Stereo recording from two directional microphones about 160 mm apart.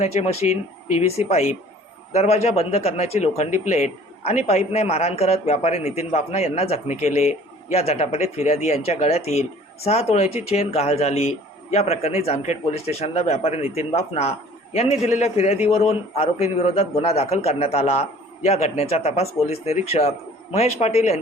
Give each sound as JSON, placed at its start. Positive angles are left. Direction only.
{"t": 0.0, "sound": "speech", "side_deg": 40}